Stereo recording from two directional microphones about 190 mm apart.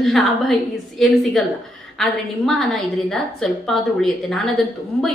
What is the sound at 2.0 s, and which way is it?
A woman's voice, centre (ahead or behind).